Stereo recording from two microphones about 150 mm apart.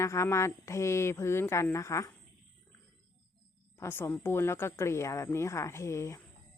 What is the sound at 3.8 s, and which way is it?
A woman's voice, 15° left (ahead or behind).